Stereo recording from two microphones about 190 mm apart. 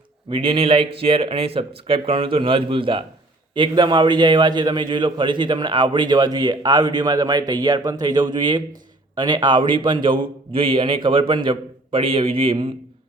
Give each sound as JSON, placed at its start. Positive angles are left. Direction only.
{"t": 0.3, "sound": "a man's voice", "side_deg": -25}